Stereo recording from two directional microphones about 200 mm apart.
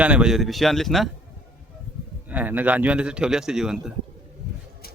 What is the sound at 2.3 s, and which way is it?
Speech, 10° right (ahead or behind).